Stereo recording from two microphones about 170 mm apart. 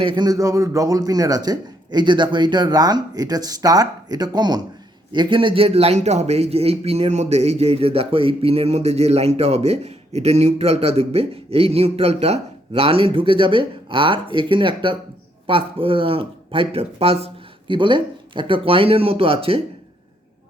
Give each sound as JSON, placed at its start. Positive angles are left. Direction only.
{"t": 0.0, "sound": "a man's voice", "side_deg": -25}